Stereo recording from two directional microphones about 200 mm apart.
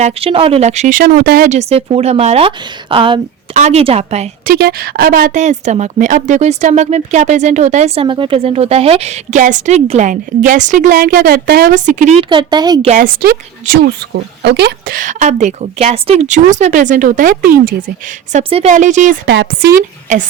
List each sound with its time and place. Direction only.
0.0 s speech: 30° right (ahead or behind); by 1.5 s 50° right (ahead or behind)
1.5 s speech: 30° right (ahead or behind)
4.5 s speech: 50° right (ahead or behind)
12.3 s a woman's voice: 20° right (ahead or behind)
12.9 s speech: 45° right (ahead or behind)
19.3 s speech: 60° right (ahead or behind)